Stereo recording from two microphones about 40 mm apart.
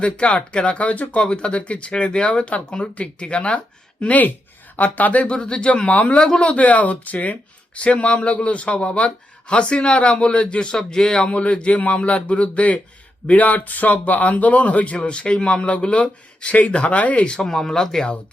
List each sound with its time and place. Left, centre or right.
0.0 s a man's voice: left
5.2 s a man's voice: left
6.1 s a man's voice: left
11.3 s a man's voice: left
17.4 s speech: centre